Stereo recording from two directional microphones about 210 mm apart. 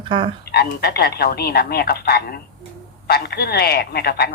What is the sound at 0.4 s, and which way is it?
Speech, 50° left (ahead or behind).